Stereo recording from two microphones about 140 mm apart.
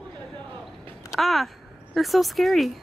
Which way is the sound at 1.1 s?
Centre (ahead or behind).